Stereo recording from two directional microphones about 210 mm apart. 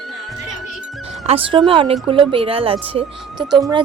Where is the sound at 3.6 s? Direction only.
20° right (ahead or behind).